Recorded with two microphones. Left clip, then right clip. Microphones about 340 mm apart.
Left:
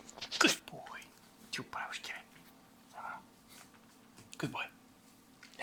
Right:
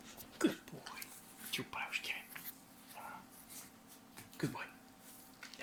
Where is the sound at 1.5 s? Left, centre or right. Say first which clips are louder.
Even; centre.